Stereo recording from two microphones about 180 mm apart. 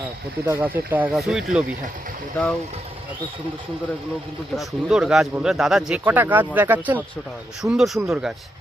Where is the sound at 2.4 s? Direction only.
10° left (ahead or behind).